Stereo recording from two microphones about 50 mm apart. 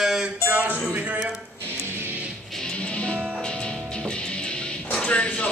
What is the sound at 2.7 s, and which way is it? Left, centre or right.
Music, left.